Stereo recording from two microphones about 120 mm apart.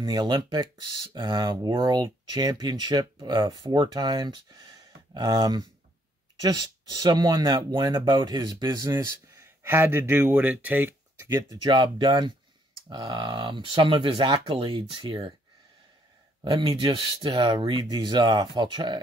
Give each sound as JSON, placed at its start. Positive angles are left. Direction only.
{"t": 0.0, "sound": "speech", "side_deg": -40}
{"t": 9.4, "sound": "speech", "side_deg": -20}
{"t": 11.2, "sound": "speech", "side_deg": -35}
{"t": 16.4, "sound": "speech", "side_deg": -35}
{"t": 16.7, "sound": "speech", "side_deg": -50}